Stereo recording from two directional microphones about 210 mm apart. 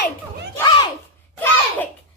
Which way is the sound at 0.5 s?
20° left (ahead or behind).